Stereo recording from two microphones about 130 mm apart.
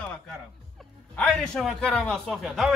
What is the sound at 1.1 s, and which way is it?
A man's voice, 5° left (ahead or behind).